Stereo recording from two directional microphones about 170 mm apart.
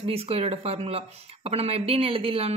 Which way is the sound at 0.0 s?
35° right (ahead or behind).